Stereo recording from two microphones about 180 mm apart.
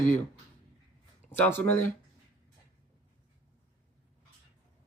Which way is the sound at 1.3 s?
10° left (ahead or behind).